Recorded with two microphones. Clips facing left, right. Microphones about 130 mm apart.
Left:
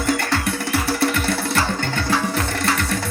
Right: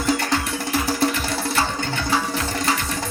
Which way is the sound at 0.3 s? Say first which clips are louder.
Left 1 dB; 60° left (ahead or behind).